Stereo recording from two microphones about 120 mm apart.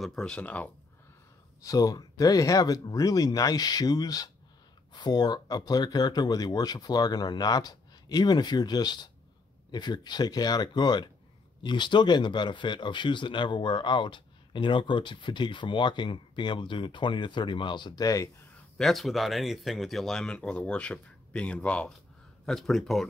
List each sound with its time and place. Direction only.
0.0 s speech: 5° left (ahead or behind)
1.6 s speech: 30° left (ahead or behind)
18.8 s speech: centre (ahead or behind)